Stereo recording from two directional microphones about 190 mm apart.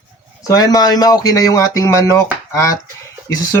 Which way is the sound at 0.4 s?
20° left (ahead or behind).